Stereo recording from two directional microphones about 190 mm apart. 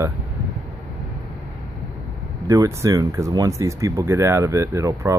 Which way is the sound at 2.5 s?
15° right (ahead or behind).